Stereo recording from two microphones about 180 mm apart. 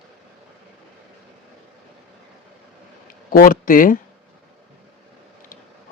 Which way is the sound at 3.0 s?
50° left (ahead or behind).